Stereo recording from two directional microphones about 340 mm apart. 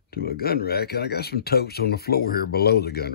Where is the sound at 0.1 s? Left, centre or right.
Left.